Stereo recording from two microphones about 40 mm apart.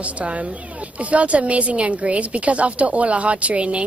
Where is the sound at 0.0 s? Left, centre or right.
Right.